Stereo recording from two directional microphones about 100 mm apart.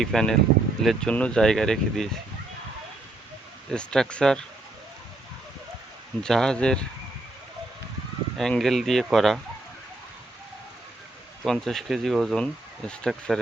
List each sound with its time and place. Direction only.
0.0 s speech: 5° left (ahead or behind)
3.7 s speech: 10° left (ahead or behind)
6.2 s speech: 5° left (ahead or behind)
8.4 s speech: 5° left (ahead or behind)
11.4 s speech: 5° left (ahead or behind)